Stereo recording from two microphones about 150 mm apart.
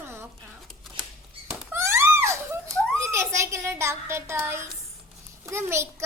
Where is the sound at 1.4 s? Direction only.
15° right (ahead or behind).